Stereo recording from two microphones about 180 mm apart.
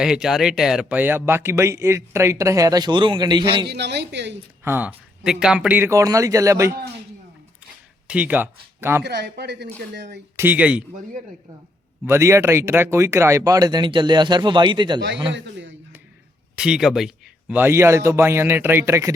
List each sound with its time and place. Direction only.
0.0 s speech: 5° right (ahead or behind); by 3.7 s 25° right (ahead or behind)
3.7 s a woman's voice: 70° right (ahead or behind)
4.6 s speech: 10° right (ahead or behind)
8.0 s speech: 5° right (ahead or behind)
9.0 s a woman's voice: 65° right (ahead or behind)
10.3 s speech: 10° right (ahead or behind)
12.0 s speech: 15° right (ahead or behind)
15.3 s a man's voice: 80° right
16.6 s speech: 5° right (ahead or behind)